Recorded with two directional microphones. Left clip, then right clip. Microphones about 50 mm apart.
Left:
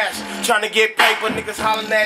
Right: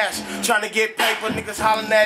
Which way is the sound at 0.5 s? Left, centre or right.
Centre.